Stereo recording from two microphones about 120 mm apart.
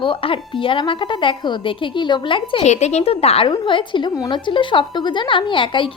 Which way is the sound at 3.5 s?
45° left (ahead or behind).